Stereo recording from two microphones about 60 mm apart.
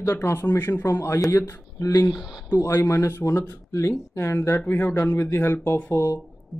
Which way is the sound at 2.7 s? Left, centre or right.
Left.